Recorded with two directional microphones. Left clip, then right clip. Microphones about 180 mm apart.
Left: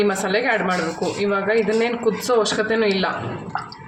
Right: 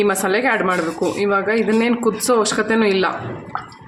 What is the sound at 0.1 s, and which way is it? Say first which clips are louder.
A man's voice: right 2 dB; 40° right (ahead or behind).